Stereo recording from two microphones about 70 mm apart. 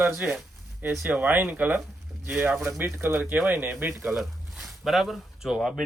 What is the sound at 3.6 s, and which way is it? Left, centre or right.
Speech, right.